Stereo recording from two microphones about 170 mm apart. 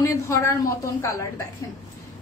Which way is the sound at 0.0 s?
20° left (ahead or behind).